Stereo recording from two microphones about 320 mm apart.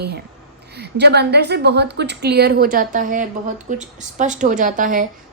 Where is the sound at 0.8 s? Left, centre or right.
Right.